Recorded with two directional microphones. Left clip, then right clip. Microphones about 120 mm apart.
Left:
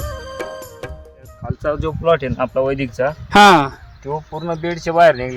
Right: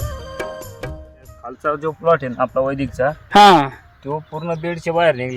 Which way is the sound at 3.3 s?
20° left (ahead or behind).